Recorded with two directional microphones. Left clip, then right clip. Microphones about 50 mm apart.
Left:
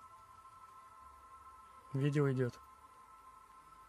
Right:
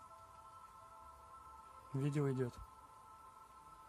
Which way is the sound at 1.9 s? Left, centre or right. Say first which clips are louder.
Left 5 dB; left.